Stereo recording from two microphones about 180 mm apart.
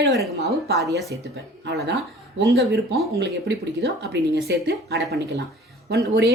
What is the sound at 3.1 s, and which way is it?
Speech, 65° right (ahead or behind).